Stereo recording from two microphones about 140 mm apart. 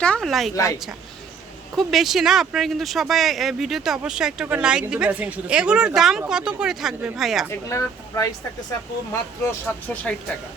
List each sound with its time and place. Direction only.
0.0 s speech: 5° left (ahead or behind)
0.5 s speech: 25° left (ahead or behind)
1.7 s speech: centre (ahead or behind)
7.7 s speech: 20° left (ahead or behind)
9.5 s speech: 10° left (ahead or behind)